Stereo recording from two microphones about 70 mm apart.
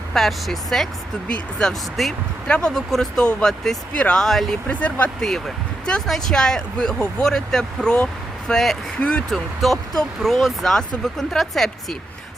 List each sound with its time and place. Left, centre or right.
0.1 s speech: centre
4.7 s speech: left
5.8 s speech: centre
9.0 s speech: centre
9.3 s speech: centre